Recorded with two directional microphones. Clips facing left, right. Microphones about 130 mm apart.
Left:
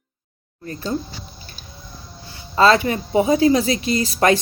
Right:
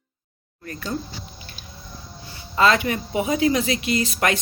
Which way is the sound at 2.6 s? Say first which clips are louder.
Left 4 dB; 30° left (ahead or behind).